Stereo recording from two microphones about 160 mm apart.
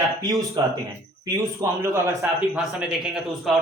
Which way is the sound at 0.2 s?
20° right (ahead or behind).